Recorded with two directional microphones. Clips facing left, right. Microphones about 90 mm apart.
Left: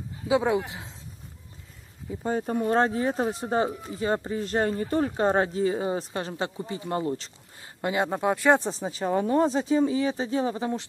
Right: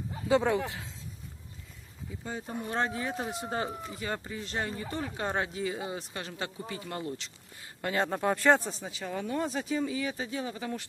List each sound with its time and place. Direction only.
0.3 s speech: 15° left (ahead or behind)
2.2 s speech: 50° left (ahead or behind)
2.8 s speech: 35° left (ahead or behind)
7.8 s speech: 15° left (ahead or behind)
8.6 s speech: 35° left (ahead or behind)